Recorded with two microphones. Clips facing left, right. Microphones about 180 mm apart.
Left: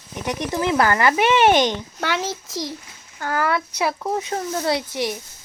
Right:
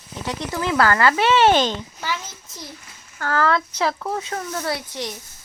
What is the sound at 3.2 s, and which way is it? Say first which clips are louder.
Speech: right 2 dB; 15° left (ahead or behind).